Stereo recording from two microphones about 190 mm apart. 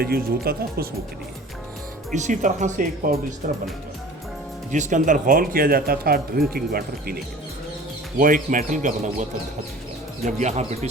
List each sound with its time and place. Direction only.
0.0 s speech: 50° right (ahead or behind)
2.1 s speech: 40° right (ahead or behind)
4.7 s speech: 40° right (ahead or behind)
8.2 s speech: 45° right (ahead or behind)
10.2 s speech: 40° right (ahead or behind)